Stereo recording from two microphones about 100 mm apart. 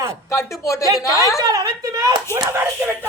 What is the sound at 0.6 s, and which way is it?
Speech, 35° left (ahead or behind).